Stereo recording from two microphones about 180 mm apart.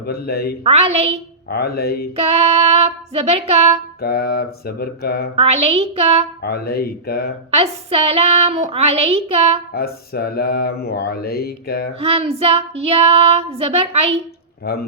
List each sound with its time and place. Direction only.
0.1 s mantra: 60° left (ahead or behind)
0.6 s child singing: 35° right (ahead or behind)
1.5 s mantra: 60° left (ahead or behind)
2.1 s child singing: 35° right (ahead or behind)
4.0 s mantra: 60° left (ahead or behind)
5.4 s child singing: 35° right (ahead or behind)
6.4 s mantra: 60° left (ahead or behind)
7.5 s child singing: 35° right (ahead or behind)
9.7 s mantra: 60° left (ahead or behind)
11.9 s child singing: 35° right (ahead or behind)
14.6 s speech: 60° left (ahead or behind)